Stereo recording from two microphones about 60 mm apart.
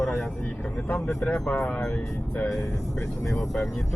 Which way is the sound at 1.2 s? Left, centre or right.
Centre.